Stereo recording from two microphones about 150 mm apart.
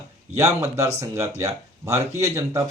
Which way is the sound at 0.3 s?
20° right (ahead or behind).